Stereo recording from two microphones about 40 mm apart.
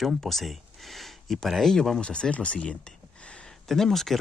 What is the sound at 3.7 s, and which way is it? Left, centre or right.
Speech, centre.